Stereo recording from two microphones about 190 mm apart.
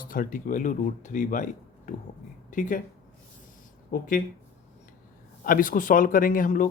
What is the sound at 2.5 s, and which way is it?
Speech, 40° left (ahead or behind).